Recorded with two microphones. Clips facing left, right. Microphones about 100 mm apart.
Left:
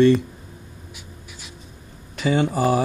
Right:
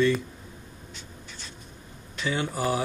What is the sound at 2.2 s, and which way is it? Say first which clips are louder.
Speech: left 9 dB; 60° left (ahead or behind).